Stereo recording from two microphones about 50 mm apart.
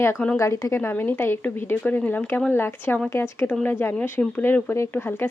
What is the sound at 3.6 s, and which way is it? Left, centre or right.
Speech, left.